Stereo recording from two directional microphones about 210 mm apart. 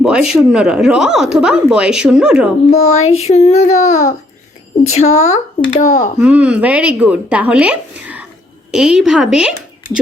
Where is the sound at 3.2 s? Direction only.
30° left (ahead or behind).